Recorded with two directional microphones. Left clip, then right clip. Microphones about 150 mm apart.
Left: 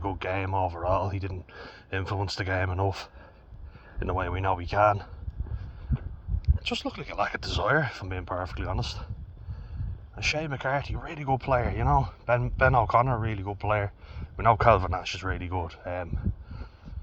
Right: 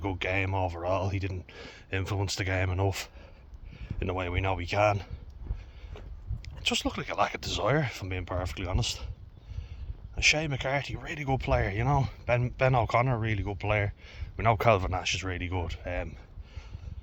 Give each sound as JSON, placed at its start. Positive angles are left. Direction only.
{"t": 0.0, "sound": "speech", "side_deg": -30}
{"t": 6.4, "sound": "speech", "side_deg": -30}
{"t": 10.2, "sound": "speech", "side_deg": -25}